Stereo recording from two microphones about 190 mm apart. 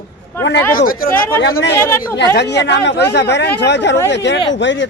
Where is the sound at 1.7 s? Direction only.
15° left (ahead or behind).